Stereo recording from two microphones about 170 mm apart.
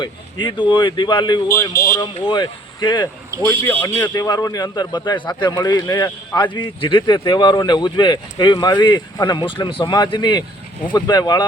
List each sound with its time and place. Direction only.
0.0 s a man's voice: 25° left (ahead or behind)
3.4 s speech: 15° left (ahead or behind)
4.0 s a man's voice: 25° left (ahead or behind)